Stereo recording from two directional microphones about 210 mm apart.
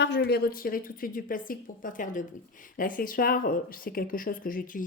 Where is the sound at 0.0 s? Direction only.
55° left (ahead or behind).